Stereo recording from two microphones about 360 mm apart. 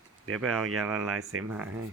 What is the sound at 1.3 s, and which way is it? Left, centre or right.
Speech, right.